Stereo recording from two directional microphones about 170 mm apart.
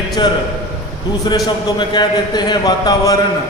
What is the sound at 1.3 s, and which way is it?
A man's voice, 25° left (ahead or behind).